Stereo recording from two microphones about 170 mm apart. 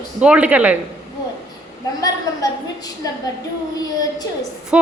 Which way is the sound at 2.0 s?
20° left (ahead or behind).